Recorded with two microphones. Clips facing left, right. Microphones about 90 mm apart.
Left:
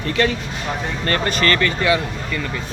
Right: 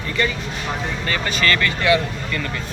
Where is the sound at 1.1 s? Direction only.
40° left (ahead or behind).